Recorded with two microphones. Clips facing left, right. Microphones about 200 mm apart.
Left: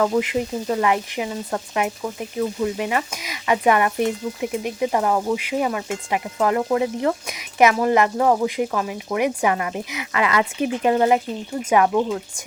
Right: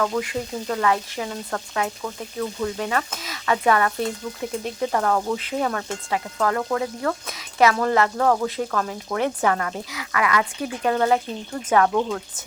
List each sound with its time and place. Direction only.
0.0 s speech: 20° left (ahead or behind)